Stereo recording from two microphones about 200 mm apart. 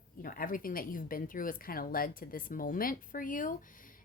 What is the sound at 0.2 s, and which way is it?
Speech, 45° left (ahead or behind).